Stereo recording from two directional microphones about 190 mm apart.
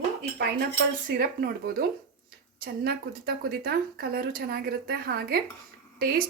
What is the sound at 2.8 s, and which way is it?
A woman's voice, 55° right (ahead or behind).